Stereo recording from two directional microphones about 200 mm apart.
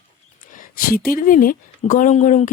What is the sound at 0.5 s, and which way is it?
A woman's voice, 45° left (ahead or behind).